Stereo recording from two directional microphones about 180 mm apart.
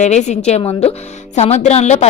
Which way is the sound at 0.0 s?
40° left (ahead or behind).